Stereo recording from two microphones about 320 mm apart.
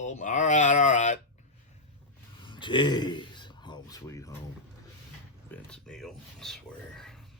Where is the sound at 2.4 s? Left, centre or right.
Centre.